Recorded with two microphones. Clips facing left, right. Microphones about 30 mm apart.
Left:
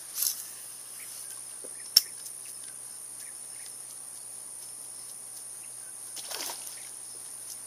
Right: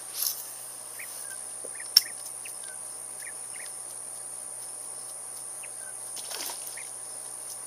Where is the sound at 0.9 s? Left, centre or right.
Centre.